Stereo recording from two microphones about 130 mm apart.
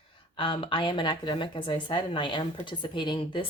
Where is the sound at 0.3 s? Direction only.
40° left (ahead or behind).